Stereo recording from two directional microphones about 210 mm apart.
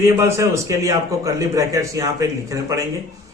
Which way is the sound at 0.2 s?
15° right (ahead or behind).